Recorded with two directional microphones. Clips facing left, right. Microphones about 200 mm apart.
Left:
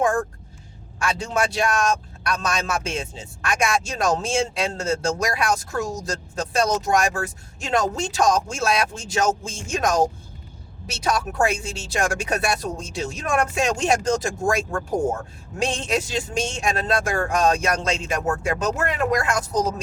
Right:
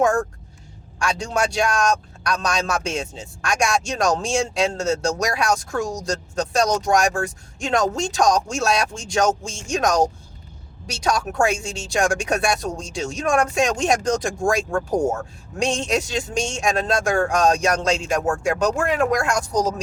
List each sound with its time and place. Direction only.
0.9 s speech: 5° left (ahead or behind)